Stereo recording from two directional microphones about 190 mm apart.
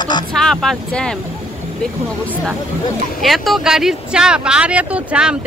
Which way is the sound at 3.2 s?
Centre (ahead or behind).